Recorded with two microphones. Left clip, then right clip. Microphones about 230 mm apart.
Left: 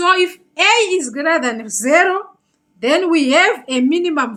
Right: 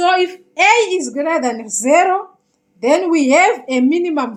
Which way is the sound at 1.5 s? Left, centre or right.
Centre.